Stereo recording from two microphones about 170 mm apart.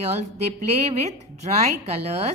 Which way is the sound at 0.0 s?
40° right (ahead or behind).